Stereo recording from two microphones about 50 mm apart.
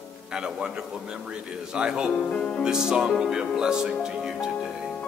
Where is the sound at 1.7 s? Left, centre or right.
Centre.